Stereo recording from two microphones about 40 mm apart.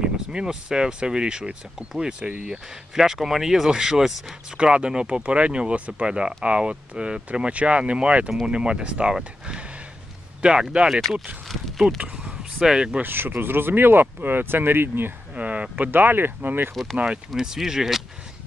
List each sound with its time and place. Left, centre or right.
0.0 s speech: right
2.9 s speech: centre
4.6 s speech: right
10.4 s speech: right
11.0 s speech: centre
11.8 s speech: centre
13.0 s speech: right
15.3 s a sound: right
15.7 s speech: right
16.9 s speech: right
17.3 s speech: centre